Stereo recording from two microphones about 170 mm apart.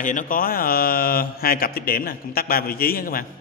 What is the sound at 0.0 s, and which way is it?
A man's voice, 50° left (ahead or behind).